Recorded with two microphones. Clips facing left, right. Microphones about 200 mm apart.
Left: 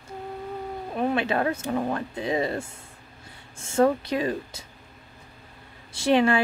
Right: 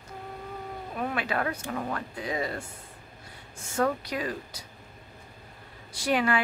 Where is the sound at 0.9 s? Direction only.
25° left (ahead or behind).